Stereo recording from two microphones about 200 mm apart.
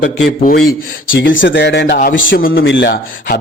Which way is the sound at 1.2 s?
65° left (ahead or behind).